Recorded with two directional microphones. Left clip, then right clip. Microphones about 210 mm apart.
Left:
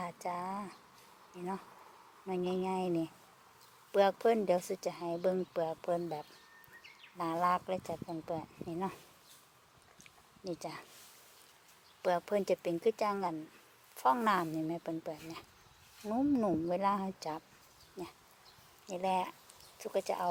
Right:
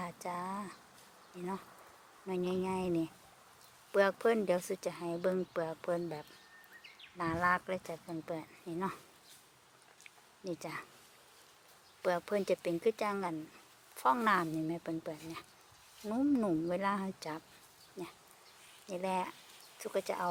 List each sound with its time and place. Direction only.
0.0 s speech: 5° right (ahead or behind)
2.2 s speech: 5° right (ahead or behind)
10.0 s a sound: 5° right (ahead or behind)
12.0 s speech: 5° right (ahead or behind)
18.9 s speech: 5° right (ahead or behind)